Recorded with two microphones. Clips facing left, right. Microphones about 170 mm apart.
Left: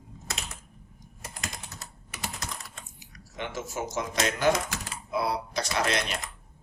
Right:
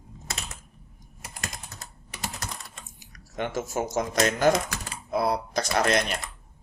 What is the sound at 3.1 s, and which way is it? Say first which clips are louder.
Speech: right 5 dB; 45° right (ahead or behind).